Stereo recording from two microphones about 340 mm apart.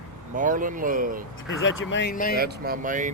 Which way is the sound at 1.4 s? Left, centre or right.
Left.